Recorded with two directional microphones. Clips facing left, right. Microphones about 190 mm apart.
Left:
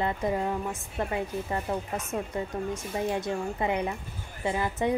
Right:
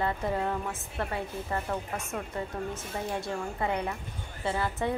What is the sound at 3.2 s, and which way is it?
A woman's voice, 15° left (ahead or behind).